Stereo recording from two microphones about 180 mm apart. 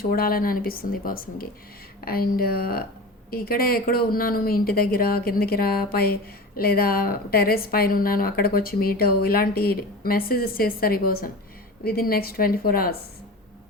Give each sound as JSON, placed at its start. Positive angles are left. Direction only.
{"t": 0.1, "sound": "a woman's voice", "side_deg": 55}